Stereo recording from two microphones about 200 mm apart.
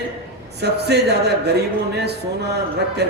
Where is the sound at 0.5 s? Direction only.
55° right (ahead or behind).